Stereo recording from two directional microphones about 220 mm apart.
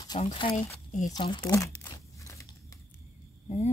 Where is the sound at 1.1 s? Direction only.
20° left (ahead or behind).